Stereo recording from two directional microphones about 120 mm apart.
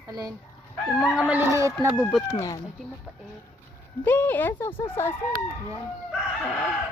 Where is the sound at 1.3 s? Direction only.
20° right (ahead or behind).